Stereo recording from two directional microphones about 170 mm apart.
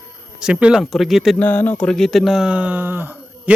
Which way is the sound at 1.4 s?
10° left (ahead or behind).